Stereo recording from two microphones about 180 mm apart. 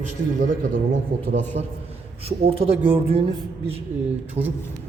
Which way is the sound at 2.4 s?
30° right (ahead or behind).